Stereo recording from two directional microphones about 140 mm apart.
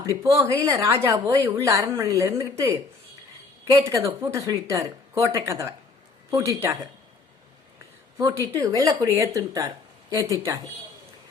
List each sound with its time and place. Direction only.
0.0 s speech: 20° right (ahead or behind)
4.2 s speech: 20° right (ahead or behind)
8.2 s speech: 25° right (ahead or behind)